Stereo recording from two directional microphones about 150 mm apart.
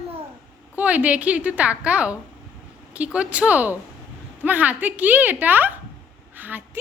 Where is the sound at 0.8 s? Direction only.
10° right (ahead or behind).